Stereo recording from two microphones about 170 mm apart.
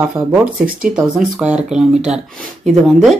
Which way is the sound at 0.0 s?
10° right (ahead or behind).